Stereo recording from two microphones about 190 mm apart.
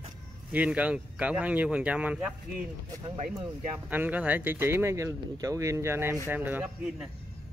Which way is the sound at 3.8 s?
10° right (ahead or behind).